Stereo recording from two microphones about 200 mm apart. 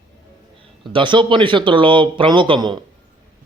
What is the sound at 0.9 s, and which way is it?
Speech, 25° right (ahead or behind).